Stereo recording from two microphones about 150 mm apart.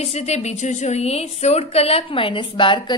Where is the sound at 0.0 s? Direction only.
45° left (ahead or behind).